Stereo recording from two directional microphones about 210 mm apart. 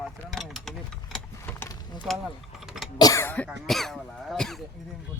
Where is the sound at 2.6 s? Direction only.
Centre (ahead or behind).